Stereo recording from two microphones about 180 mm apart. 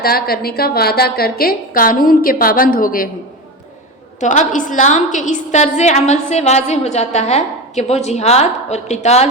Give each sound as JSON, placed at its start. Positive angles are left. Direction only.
{"t": 0.0, "sound": "a woman's voice", "side_deg": 55}
{"t": 4.2, "sound": "a woman's voice", "side_deg": 45}